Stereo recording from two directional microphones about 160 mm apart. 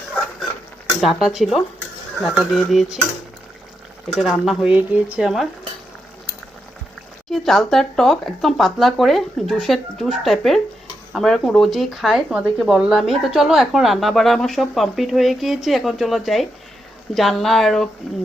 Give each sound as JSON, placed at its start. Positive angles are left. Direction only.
{"t": 1.0, "sound": "speech", "side_deg": 0}
{"t": 4.1, "sound": "speech", "side_deg": 0}
{"t": 7.3, "sound": "speech", "side_deg": 0}